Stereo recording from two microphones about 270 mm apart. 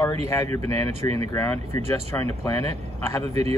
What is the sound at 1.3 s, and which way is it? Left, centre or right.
Speech, centre.